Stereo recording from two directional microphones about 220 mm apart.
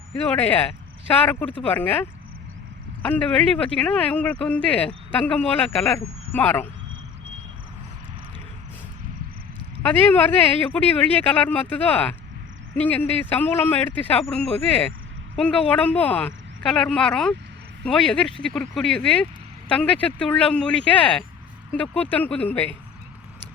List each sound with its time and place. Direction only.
0.3 s speech: 5° left (ahead or behind)
9.8 s speech: 10° left (ahead or behind)